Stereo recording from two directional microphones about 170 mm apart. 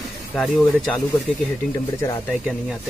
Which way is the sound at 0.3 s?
10° left (ahead or behind).